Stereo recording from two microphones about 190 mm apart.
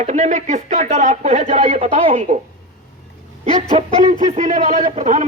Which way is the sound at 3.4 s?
30° right (ahead or behind).